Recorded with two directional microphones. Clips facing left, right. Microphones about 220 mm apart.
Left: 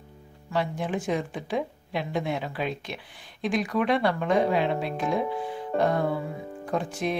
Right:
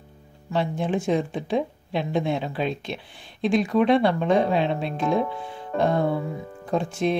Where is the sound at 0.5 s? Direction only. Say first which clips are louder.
Right 3 dB; 25° right (ahead or behind).